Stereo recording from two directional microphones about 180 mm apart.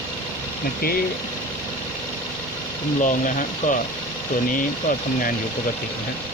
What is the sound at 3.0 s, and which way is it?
Speech, 45° left (ahead or behind).